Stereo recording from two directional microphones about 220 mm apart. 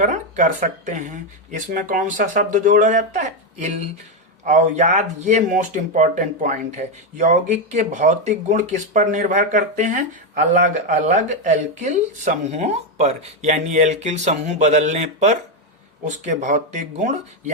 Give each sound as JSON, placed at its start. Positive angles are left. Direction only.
{"t": 0.0, "sound": "speech", "side_deg": -35}